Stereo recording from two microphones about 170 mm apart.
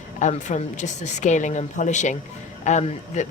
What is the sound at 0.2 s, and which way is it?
Speech, 45° left (ahead or behind).